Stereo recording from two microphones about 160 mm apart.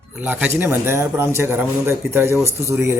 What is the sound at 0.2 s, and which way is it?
A man's voice, 10° right (ahead or behind).